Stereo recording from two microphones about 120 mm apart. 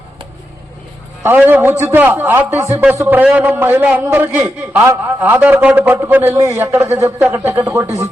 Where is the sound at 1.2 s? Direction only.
15° right (ahead or behind).